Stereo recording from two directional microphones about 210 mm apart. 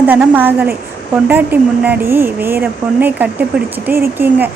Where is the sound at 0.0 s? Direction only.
10° right (ahead or behind).